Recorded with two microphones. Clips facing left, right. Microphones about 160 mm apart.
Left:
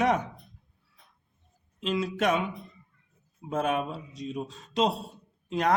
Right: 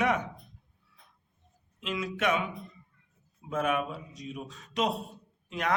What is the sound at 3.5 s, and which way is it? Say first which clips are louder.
A man's voice: left 1 dB; 30° left (ahead or behind).